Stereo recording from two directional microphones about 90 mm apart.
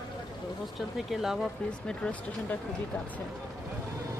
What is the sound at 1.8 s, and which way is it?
Speech, 10° left (ahead or behind).